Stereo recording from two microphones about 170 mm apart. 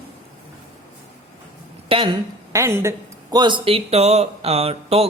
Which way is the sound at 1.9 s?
35° right (ahead or behind).